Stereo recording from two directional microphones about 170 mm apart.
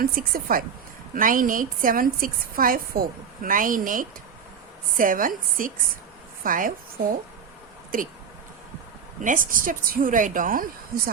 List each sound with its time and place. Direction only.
0.0 s a woman's voice: 60° right (ahead or behind)
9.2 s a woman's voice: 50° right (ahead or behind)